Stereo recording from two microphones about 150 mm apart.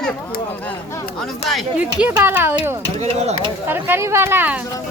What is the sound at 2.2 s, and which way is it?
Speech, 15° right (ahead or behind).